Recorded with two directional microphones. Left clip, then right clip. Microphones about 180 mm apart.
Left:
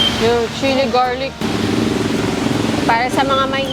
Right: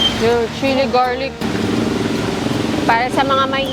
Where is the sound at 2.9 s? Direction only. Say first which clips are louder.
Right 1 dB; 30° right (ahead or behind).